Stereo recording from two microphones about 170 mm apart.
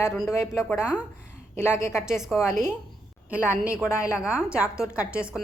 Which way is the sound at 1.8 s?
15° left (ahead or behind).